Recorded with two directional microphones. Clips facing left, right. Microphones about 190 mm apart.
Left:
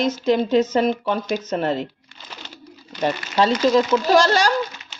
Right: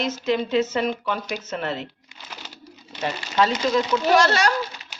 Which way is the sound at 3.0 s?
30° left (ahead or behind).